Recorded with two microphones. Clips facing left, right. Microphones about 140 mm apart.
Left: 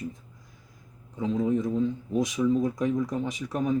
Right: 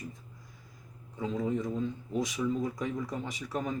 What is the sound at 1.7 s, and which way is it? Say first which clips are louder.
Speech: left 6 dB; 15° left (ahead or behind).